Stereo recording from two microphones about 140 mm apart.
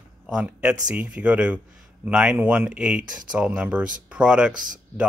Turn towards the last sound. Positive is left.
turn(degrees=-70)  # may be behind; listen again after turning